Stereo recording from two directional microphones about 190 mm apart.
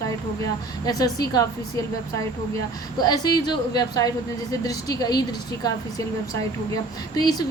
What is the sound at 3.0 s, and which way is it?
A woman's voice, 20° left (ahead or behind).